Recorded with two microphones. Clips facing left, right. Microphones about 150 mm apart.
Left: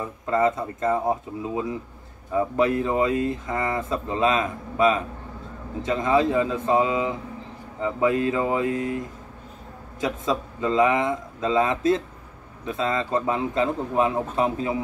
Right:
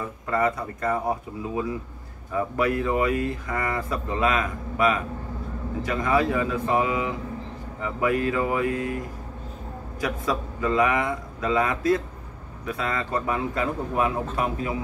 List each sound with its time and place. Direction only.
0.0 s speech: 20° left (ahead or behind)